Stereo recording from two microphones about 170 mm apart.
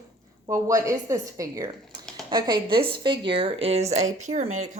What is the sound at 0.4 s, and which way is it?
A woman's voice, 20° right (ahead or behind).